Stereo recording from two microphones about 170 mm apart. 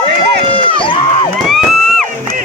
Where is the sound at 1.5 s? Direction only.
Centre (ahead or behind).